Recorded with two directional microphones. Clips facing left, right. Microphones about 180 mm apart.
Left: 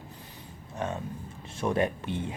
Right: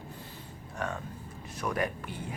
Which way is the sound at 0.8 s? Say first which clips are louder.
Left 3 dB; 20° left (ahead or behind).